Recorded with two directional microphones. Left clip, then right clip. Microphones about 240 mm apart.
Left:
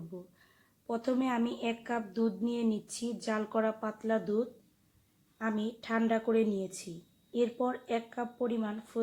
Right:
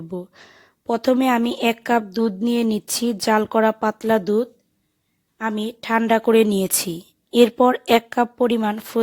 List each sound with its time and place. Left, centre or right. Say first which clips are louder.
0.1 s speech: right 16 dB; right